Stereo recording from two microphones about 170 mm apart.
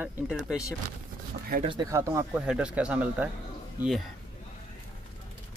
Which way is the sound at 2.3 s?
5° right (ahead or behind).